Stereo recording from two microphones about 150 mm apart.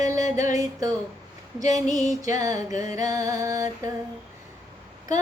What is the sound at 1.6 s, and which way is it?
Female singing, 25° right (ahead or behind).